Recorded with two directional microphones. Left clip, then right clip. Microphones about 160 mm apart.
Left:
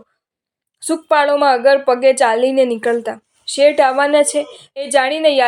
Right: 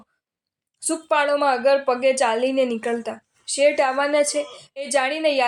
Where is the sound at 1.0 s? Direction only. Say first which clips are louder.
Left 7 dB; 20° left (ahead or behind).